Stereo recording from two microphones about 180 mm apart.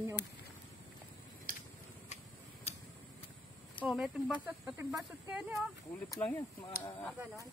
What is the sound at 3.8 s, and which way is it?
Speech, centre (ahead or behind).